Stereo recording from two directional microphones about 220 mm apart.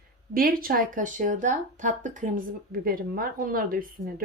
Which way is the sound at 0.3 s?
40° right (ahead or behind).